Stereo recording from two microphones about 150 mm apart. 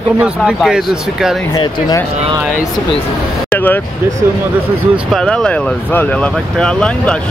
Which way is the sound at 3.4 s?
10° left (ahead or behind).